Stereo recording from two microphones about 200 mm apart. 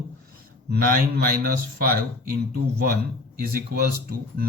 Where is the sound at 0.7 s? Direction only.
50° right (ahead or behind).